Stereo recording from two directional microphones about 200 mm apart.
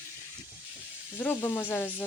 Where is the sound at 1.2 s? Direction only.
10° left (ahead or behind).